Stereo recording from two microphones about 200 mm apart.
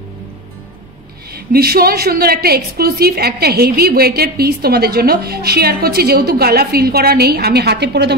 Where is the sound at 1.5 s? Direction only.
50° right (ahead or behind).